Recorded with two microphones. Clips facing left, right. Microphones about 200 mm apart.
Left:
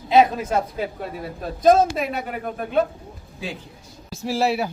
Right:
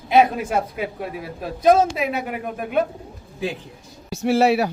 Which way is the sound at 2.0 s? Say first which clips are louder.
Right 2 dB; 10° right (ahead or behind).